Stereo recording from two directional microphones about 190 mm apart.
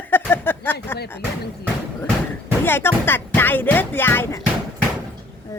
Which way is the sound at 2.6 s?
10° left (ahead or behind).